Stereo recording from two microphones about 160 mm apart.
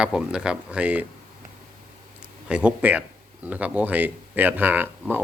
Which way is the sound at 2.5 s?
10° right (ahead or behind).